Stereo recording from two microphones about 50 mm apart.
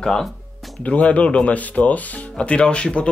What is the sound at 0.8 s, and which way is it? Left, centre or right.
Speech, left.